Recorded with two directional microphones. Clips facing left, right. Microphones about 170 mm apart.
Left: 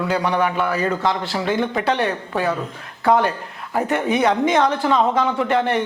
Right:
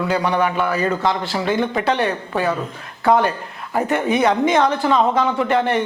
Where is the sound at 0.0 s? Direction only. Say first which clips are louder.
Right 1 dB; 15° right (ahead or behind).